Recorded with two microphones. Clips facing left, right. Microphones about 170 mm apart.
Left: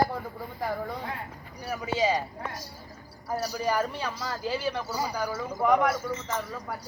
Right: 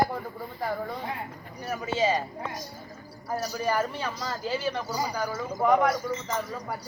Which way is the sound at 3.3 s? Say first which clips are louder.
Even; 10° left (ahead or behind).